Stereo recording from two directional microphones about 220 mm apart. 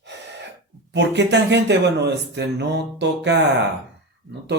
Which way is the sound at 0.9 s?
50° right (ahead or behind).